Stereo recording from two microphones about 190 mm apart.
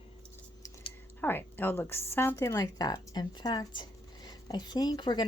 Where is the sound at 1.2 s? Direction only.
10° left (ahead or behind).